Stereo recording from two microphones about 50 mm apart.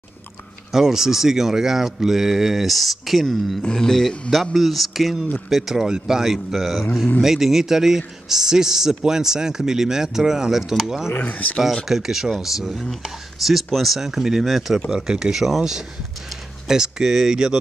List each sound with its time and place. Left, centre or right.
0.7 s speech: centre
3.6 s speech: centre
11.1 s speech: left
11.9 s speech: centre
14.9 s speech: centre